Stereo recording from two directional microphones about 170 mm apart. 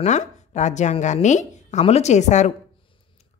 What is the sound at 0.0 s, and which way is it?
A woman's voice, 40° left (ahead or behind).